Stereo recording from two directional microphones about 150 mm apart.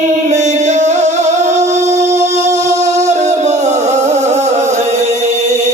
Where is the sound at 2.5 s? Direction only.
50° right (ahead or behind).